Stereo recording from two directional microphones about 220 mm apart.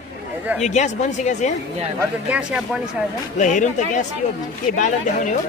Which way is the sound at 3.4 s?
35° left (ahead or behind).